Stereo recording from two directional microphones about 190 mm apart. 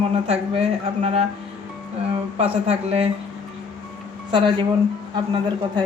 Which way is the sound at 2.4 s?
30° right (ahead or behind).